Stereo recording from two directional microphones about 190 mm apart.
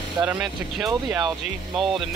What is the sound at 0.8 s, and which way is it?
Speech, 20° right (ahead or behind).